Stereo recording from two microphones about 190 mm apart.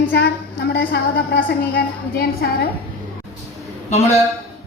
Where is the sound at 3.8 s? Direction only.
35° left (ahead or behind).